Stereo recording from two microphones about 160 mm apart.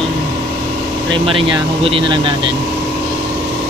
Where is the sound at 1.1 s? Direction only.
35° right (ahead or behind).